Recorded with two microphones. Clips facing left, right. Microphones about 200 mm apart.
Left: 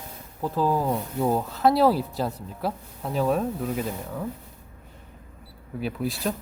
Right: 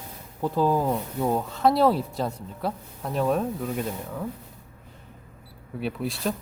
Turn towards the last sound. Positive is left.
turn(degrees=0)  # may be behind; listen again after turning